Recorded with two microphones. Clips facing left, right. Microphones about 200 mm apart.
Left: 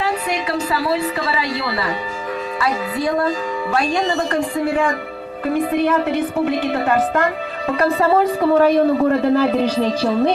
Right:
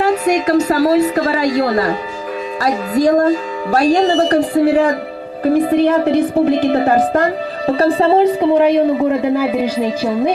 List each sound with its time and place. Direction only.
0.0 s a woman's voice: 45° right (ahead or behind); by 10.3 s 10° right (ahead or behind)